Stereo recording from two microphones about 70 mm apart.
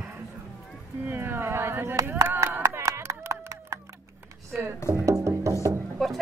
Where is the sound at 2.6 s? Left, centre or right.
Right.